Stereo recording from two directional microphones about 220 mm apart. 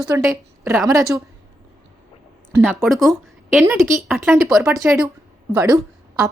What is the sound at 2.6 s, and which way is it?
Speech, centre (ahead or behind).